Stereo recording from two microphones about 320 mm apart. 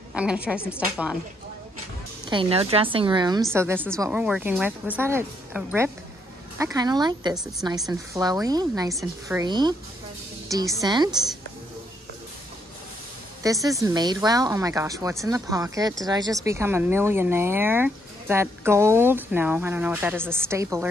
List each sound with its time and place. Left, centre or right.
0.1 s speech: centre
2.2 s speech: centre
13.4 s speech: centre